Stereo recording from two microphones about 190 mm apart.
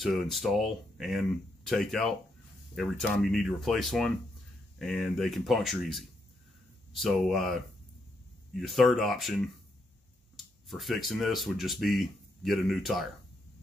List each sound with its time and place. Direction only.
0.0 s speech: centre (ahead or behind)